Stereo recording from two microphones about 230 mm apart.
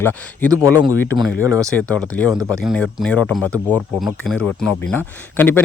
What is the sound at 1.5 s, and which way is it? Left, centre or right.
Speech, centre.